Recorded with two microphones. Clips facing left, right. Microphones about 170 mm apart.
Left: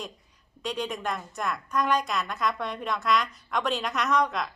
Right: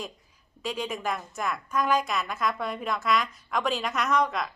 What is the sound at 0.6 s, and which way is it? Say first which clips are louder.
A woman's voice: even; centre (ahead or behind).